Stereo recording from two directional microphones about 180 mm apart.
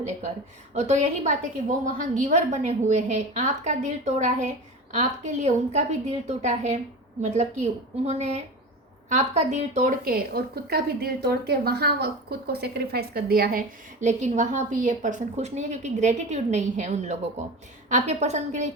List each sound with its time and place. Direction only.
0.8 s a woman's voice: 40° right (ahead or behind)